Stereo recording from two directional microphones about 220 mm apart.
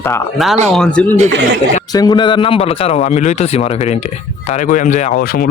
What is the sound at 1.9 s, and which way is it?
A man's voice, 20° left (ahead or behind).